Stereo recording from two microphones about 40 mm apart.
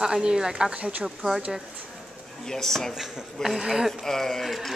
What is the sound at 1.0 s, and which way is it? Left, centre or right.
Speech, centre.